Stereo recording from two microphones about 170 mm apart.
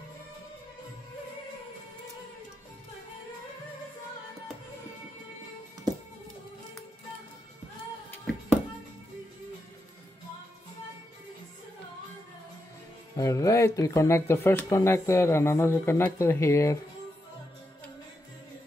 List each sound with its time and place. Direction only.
13.1 s speech: 20° left (ahead or behind)